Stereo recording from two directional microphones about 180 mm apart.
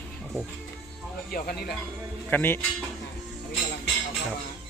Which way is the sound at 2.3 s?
10° left (ahead or behind).